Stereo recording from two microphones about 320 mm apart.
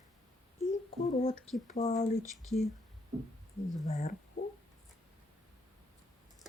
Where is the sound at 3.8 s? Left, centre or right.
Left.